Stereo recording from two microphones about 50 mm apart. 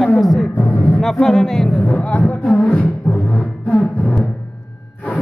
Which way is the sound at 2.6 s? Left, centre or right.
Left.